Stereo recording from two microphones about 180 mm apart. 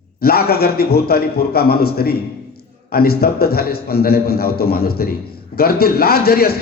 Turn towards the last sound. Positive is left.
turn(degrees=60)  # may be behind; listen again after turning